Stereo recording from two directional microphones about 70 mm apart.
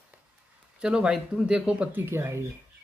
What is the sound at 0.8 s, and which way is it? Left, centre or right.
Speech, centre.